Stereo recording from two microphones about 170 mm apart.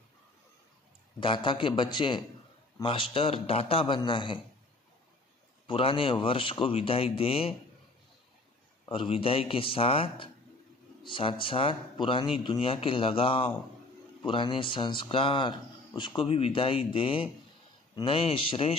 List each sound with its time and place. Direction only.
1.2 s a man's voice: 30° left (ahead or behind)
5.7 s speech: 30° left (ahead or behind)
8.8 s speech: 30° left (ahead or behind)